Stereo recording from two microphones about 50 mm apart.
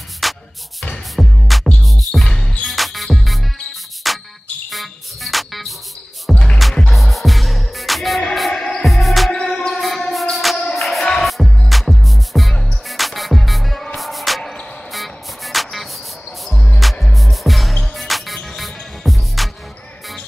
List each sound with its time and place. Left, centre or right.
0.2 s music: centre
2.2 s music: centre
2.6 s music: centre
4.6 s cricket: centre
6.3 s music: left
6.6 s music: centre
9.3 s music: centre
16.4 s music: centre
16.8 s music: centre